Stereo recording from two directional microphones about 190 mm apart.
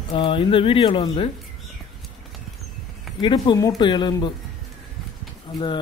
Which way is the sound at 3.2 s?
25° left (ahead or behind).